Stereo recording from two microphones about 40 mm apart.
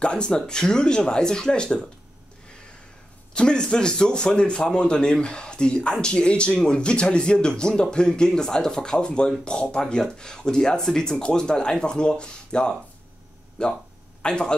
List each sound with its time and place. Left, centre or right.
0.0 s a man's voice: left
3.3 s a man's voice: left